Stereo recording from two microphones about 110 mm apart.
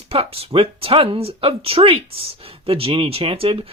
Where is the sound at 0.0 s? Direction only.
65° right (ahead or behind).